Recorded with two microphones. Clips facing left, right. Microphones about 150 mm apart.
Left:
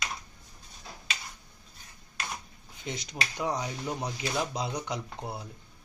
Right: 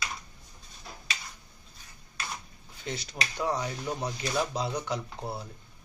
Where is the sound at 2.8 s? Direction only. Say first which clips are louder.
Even; 15° left (ahead or behind).